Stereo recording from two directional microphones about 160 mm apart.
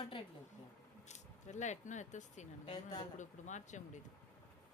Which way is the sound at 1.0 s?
50° left (ahead or behind).